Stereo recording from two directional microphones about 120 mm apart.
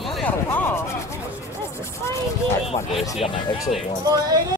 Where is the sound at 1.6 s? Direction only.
20° left (ahead or behind).